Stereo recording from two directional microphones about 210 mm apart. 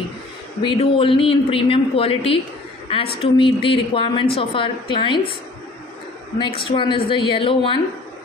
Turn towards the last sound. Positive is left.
turn(degrees=25)  # may be behind; listen again after turning